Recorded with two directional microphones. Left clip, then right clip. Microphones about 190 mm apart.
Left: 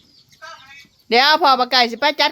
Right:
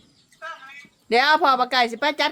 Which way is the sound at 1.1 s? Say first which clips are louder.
Left 4 dB; 25° left (ahead or behind).